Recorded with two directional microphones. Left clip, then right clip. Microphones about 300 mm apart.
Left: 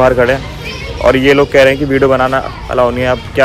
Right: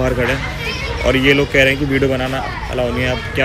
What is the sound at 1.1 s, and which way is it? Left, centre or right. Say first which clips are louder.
Speech: left 4 dB; centre.